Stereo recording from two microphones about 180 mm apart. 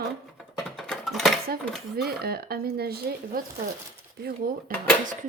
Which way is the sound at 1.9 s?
60° right (ahead or behind).